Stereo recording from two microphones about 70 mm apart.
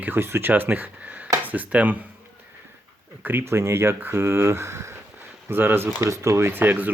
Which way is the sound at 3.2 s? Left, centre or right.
Right.